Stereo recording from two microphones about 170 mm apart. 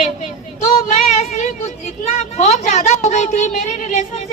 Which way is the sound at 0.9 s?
40° left (ahead or behind).